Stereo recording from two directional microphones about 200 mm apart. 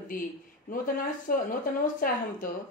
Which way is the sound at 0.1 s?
45° left (ahead or behind).